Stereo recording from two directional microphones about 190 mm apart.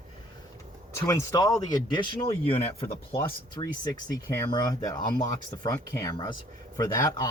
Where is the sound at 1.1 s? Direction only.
20° left (ahead or behind).